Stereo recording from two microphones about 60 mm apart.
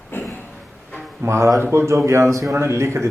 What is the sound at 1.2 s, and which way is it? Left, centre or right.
Speech, right.